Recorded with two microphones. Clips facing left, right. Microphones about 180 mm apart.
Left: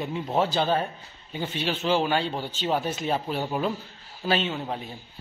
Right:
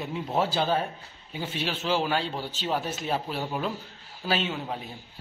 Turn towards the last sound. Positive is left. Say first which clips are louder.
# left 2 dB
turn(degrees=-5)  # may be behind; listen again after turning